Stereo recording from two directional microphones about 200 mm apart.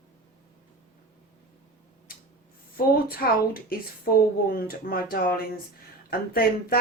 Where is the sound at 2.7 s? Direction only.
45° left (ahead or behind).